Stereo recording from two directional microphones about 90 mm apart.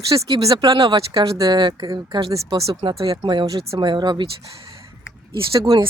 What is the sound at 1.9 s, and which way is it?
Speech, 40° right (ahead or behind).